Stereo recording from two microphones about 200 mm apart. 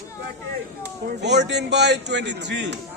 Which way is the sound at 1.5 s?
60° right (ahead or behind).